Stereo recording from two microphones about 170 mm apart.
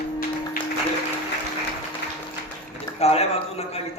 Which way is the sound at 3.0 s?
40° left (ahead or behind).